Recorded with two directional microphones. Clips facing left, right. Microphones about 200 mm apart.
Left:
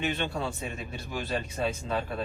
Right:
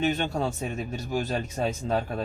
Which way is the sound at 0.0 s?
40° right (ahead or behind).